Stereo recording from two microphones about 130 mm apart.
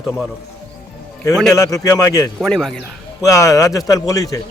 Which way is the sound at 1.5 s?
25° left (ahead or behind).